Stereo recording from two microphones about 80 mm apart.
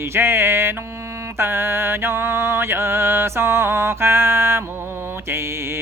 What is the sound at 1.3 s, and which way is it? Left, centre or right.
Mantra, right.